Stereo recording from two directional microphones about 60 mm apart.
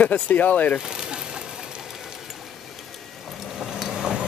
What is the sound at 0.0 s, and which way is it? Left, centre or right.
Speech, left.